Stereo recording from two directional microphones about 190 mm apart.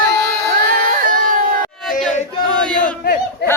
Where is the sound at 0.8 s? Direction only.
45° right (ahead or behind).